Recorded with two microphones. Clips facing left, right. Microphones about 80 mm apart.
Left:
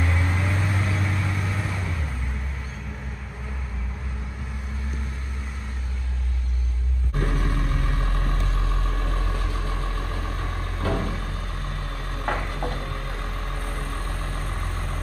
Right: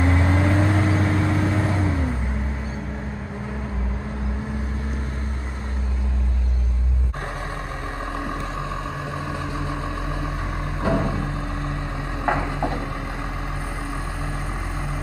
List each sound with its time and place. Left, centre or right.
0.0 s vehicle: right
7.3 s vehicle: right
12.2 s a sound: centre